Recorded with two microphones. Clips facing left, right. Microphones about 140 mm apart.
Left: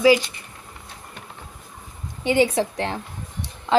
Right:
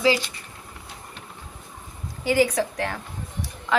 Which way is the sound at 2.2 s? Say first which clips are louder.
Left 2 dB; 25° left (ahead or behind).